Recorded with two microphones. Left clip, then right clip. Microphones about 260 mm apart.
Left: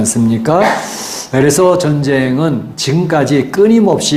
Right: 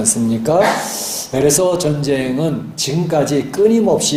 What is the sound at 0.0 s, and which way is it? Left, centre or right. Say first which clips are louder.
Speech: left 3 dB; left.